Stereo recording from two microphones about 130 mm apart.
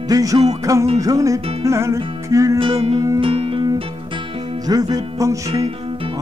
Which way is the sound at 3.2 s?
45° right (ahead or behind).